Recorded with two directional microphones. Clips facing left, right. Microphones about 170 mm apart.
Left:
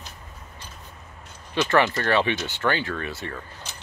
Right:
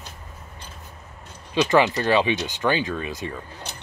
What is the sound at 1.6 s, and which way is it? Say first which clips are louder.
Speech: right 2 dB; 15° right (ahead or behind).